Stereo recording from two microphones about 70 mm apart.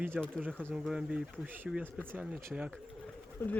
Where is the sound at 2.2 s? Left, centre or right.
Centre.